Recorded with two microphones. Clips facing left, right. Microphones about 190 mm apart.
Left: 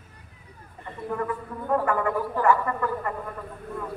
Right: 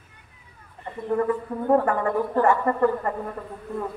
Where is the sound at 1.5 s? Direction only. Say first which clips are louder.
Right 3 dB; 35° right (ahead or behind).